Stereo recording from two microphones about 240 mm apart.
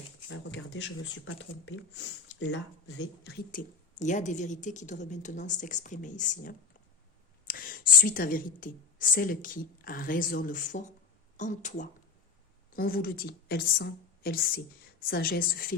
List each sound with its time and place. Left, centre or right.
0.3 s speech: left
3.5 s a woman's voice: left